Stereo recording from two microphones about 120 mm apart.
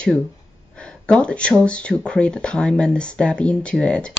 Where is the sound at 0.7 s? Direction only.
10° left (ahead or behind).